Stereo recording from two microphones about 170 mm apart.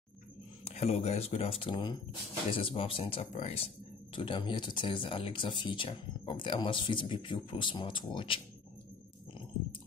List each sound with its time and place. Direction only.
0.7 s speech: 40° left (ahead or behind)